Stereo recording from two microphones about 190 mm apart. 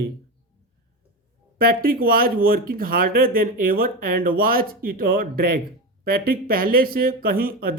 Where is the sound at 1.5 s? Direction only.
50° right (ahead or behind).